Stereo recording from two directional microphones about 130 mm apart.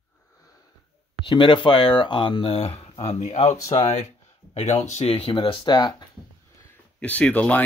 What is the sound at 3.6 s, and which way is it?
Speech, 30° left (ahead or behind).